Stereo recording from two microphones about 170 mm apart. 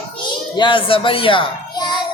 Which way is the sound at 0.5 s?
30° left (ahead or behind).